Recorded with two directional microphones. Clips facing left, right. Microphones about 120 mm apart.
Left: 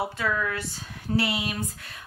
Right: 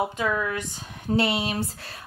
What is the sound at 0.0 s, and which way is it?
A woman's voice, 15° right (ahead or behind).